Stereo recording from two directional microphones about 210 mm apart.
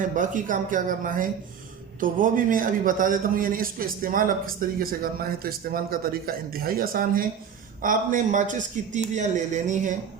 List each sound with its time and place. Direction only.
0.2 s a man's voice: 40° right (ahead or behind)